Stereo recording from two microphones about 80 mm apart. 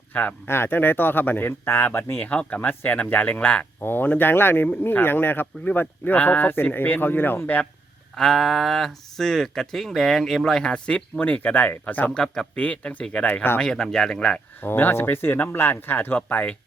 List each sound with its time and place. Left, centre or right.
0.1 s speech: left
8.1 s speech: centre
11.2 s speech: left
12.1 s speech: centre
14.6 s speech: left